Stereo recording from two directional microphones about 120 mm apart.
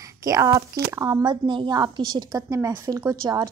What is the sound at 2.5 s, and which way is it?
Speech, 20° right (ahead or behind).